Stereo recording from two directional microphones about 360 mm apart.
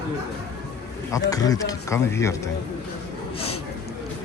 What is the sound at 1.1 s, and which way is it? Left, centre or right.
Speech, centre.